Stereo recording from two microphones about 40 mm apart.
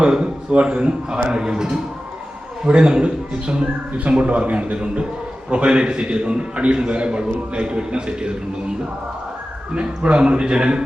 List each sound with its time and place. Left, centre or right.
0.0 s a man's voice: right
1.4 s a man's voice: centre
2.6 s a man's voice: right
9.7 s a man's voice: right